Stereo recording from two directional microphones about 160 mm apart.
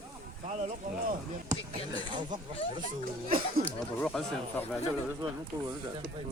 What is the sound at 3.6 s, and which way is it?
Speech, 65° right (ahead or behind).